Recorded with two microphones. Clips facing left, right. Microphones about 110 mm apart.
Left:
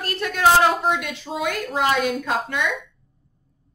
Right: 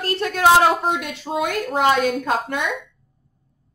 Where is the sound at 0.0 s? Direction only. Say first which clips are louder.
Right 4 dB; 30° right (ahead or behind).